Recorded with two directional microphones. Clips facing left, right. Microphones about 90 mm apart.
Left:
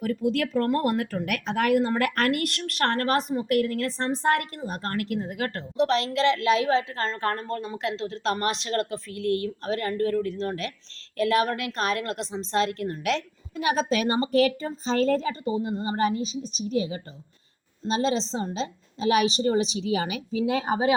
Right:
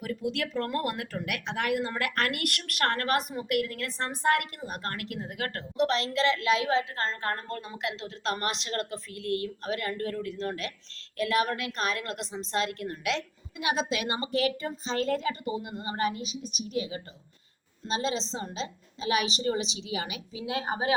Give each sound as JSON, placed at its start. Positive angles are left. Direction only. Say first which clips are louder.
{"t": 0.0, "sound": "speech", "louder": "left 6 dB", "side_deg": 45}